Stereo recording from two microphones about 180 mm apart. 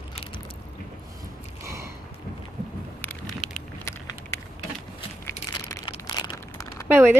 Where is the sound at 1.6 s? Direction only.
15° right (ahead or behind).